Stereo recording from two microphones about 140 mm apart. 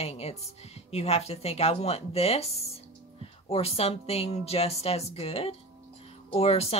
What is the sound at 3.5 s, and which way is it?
Speech, 45° left (ahead or behind).